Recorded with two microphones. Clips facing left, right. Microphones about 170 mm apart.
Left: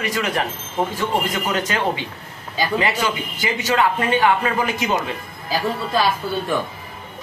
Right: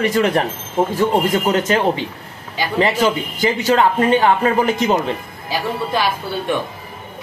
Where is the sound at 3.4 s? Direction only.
35° right (ahead or behind).